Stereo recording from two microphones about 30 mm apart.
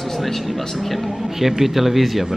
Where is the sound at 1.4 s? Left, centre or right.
Centre.